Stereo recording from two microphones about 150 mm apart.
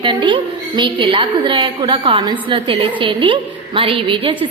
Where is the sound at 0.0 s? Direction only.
35° right (ahead or behind).